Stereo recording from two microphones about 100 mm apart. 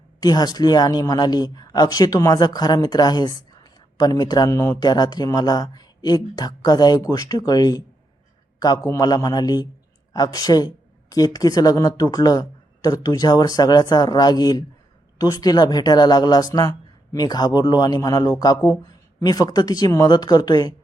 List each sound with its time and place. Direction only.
0.2 s a woman's voice: 40° left (ahead or behind)